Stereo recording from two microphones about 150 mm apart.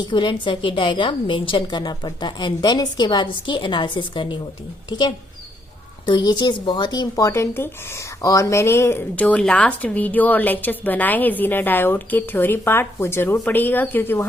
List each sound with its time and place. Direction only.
0.0 s a woman's voice: 30° left (ahead or behind); by 14.3 s 15° left (ahead or behind)